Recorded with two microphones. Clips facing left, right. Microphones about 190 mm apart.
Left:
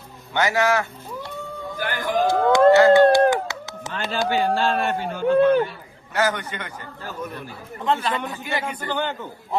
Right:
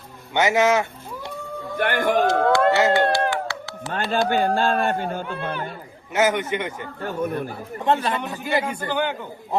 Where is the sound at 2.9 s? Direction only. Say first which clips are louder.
Left 6 dB; 20° left (ahead or behind).